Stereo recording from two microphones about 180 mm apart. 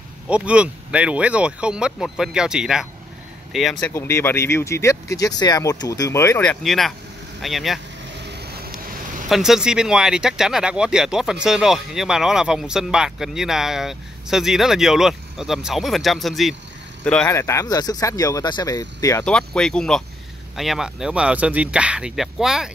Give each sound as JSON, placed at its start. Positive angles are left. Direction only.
{"t": 0.3, "sound": "speech", "side_deg": -5}
{"t": 3.8, "sound": "speech", "side_deg": 15}
{"t": 8.1, "sound": "vehicle", "side_deg": -70}
{"t": 9.3, "sound": "speech", "side_deg": 0}
{"t": 19.2, "sound": "speech", "side_deg": 5}